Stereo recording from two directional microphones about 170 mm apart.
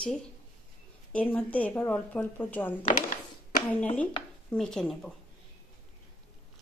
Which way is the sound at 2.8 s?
50° left (ahead or behind).